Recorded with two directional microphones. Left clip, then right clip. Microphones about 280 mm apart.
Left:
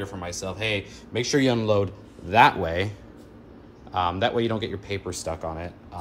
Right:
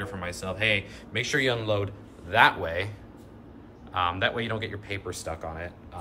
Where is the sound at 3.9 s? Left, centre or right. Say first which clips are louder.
Left 3 dB; centre.